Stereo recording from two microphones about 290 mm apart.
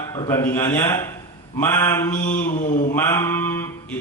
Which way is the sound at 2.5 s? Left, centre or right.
Left.